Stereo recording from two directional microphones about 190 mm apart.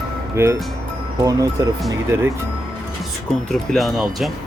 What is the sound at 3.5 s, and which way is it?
Speech, centre (ahead or behind).